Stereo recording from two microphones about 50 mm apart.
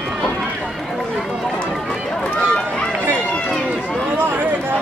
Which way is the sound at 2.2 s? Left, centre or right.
Left.